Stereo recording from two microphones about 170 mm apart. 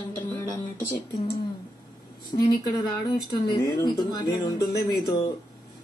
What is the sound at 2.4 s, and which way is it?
A woman's voice, 25° left (ahead or behind).